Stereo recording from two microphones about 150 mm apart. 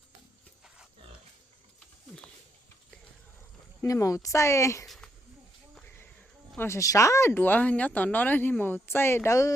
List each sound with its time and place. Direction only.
3.8 s speech: 20° left (ahead or behind)
5.7 s a sound: 10° left (ahead or behind)
6.6 s speech: 20° left (ahead or behind)